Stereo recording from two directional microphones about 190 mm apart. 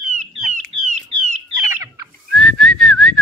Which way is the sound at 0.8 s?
40° right (ahead or behind).